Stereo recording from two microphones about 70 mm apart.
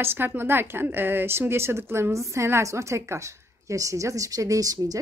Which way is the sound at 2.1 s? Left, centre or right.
Right.